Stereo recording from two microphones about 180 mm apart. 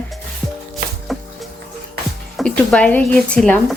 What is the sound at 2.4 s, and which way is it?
Speech, 5° left (ahead or behind).